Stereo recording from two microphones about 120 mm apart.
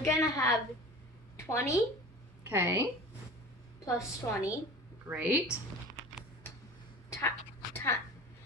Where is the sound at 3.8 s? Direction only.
25° left (ahead or behind).